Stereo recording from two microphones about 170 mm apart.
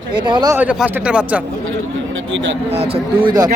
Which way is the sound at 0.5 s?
10° right (ahead or behind).